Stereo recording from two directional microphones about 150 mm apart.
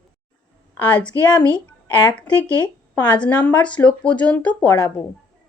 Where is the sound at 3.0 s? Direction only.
10° left (ahead or behind).